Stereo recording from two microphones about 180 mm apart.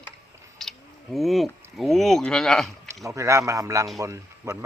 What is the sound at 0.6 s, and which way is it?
Speech, centre (ahead or behind).